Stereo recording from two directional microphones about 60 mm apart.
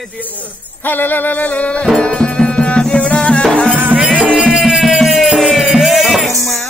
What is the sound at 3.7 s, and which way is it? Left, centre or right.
Music, right.